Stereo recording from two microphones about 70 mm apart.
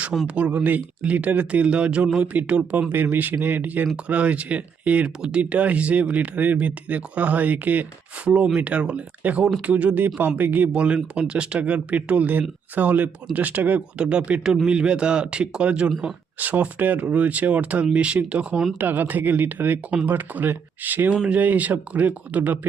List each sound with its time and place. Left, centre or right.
0.3 s speech: right